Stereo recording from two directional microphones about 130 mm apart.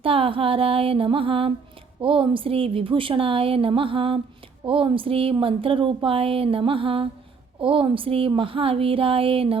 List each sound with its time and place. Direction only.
0.0 s speech: 45° right (ahead or behind)